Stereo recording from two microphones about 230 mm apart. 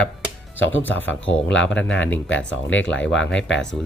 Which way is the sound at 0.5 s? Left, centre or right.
Left.